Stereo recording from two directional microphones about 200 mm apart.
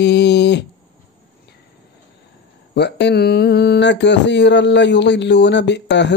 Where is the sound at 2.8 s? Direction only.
60° left (ahead or behind).